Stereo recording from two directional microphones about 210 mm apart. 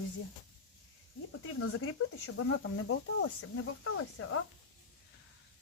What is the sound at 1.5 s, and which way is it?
Speech, 85° left.